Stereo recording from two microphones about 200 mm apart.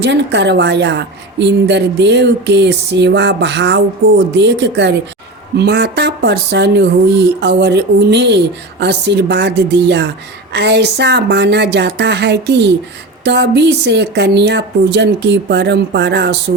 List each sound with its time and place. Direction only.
0.0 s a woman's voice: 60° right (ahead or behind)